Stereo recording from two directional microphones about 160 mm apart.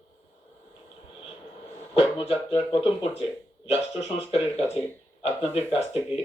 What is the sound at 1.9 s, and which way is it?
Speech, 35° left (ahead or behind).